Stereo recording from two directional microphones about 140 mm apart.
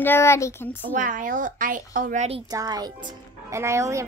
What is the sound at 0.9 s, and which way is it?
Speech, 70° right (ahead or behind).